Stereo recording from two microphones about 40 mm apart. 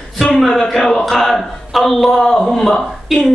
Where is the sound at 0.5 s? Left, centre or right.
Centre.